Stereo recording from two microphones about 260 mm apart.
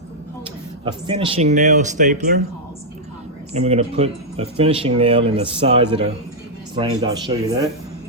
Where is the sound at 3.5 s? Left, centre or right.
Right.